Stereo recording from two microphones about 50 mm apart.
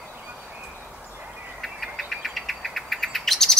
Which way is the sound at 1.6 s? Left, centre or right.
Centre.